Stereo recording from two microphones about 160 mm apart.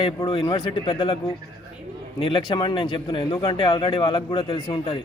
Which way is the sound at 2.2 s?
35° left (ahead or behind).